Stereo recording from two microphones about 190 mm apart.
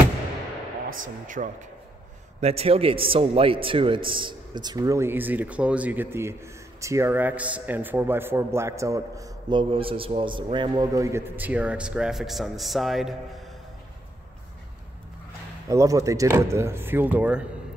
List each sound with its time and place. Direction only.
1.0 s speech: 45° right (ahead or behind)
2.4 s a man's voice: 30° right (ahead or behind); by 13.1 s centre (ahead or behind)
15.7 s a man's voice: 15° right (ahead or behind)